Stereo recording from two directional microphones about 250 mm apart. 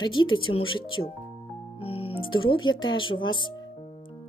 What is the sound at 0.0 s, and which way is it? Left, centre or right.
Speech, centre.